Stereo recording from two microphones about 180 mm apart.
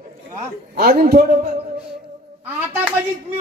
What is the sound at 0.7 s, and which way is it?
Speech, 60° right (ahead or behind).